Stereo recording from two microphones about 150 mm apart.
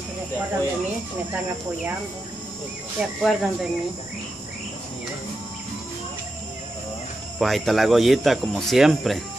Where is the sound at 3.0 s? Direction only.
Centre (ahead or behind).